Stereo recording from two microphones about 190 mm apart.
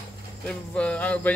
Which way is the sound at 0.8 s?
5° left (ahead or behind).